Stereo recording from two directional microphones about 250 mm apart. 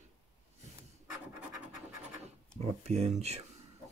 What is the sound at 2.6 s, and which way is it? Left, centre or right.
Speech, right.